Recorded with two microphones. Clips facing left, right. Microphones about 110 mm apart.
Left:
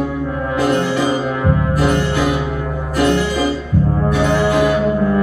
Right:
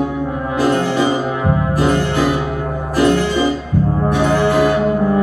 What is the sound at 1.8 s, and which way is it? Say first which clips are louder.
Music: right 2 dB; 25° right (ahead or behind).